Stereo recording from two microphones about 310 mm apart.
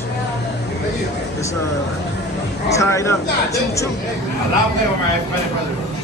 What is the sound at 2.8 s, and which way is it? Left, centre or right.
Speech, centre.